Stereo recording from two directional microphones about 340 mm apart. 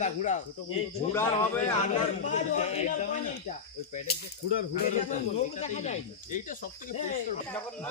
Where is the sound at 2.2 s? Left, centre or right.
Left.